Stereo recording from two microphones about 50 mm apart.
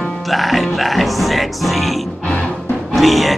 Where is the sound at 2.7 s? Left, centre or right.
Centre.